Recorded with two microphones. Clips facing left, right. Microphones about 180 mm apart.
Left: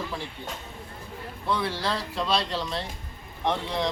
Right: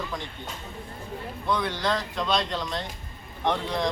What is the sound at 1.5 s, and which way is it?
Speech, 30° left (ahead or behind).